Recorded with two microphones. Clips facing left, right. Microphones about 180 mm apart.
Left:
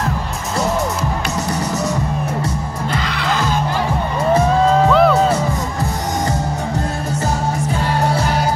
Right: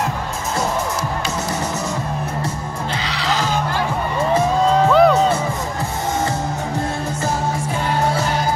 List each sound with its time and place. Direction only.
2.9 s music: 50° left (ahead or behind)
4.8 s music: centre (ahead or behind)